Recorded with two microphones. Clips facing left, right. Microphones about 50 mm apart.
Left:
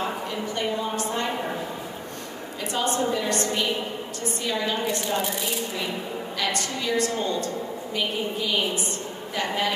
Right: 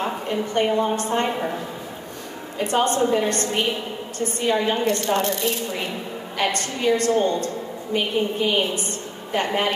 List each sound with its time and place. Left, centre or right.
0.0 s a woman's voice: right
2.6 s a woman's voice: right
6.3 s a woman's voice: right